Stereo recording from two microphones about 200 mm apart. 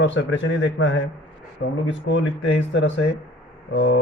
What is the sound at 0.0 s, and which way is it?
Speech, 70° left (ahead or behind).